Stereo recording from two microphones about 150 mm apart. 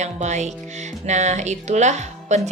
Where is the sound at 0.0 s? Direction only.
50° right (ahead or behind).